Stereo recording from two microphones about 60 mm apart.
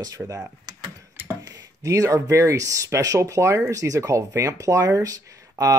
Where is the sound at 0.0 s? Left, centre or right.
Right.